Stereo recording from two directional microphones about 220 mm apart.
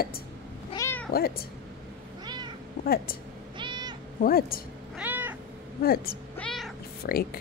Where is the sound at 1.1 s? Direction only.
45° left (ahead or behind).